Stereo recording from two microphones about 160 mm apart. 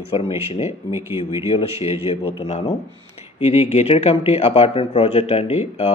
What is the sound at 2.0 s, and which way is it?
Speech, 40° left (ahead or behind).